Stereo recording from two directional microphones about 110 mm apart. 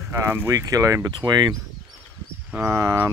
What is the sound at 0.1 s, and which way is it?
Speech, 25° right (ahead or behind).